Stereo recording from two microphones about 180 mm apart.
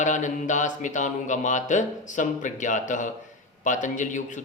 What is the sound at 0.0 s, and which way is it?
Speech, 45° left (ahead or behind).